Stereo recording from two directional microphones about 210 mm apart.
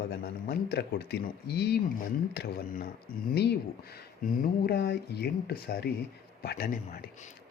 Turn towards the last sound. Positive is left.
turn(degrees=45)  # may be behind; listen again after turning